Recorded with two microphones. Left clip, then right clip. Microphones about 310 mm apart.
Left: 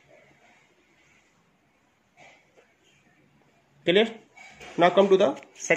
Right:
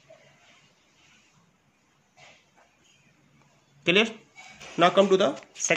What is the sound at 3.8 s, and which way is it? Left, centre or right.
Speech, centre.